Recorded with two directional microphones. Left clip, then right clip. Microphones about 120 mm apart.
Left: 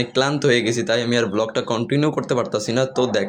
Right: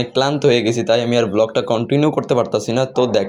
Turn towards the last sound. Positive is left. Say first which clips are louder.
# right 3 dB
turn(degrees=-20)  # may be behind; listen again after turning